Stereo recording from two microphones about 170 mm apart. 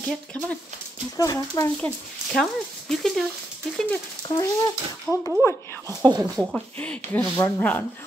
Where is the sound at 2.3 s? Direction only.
Centre (ahead or behind).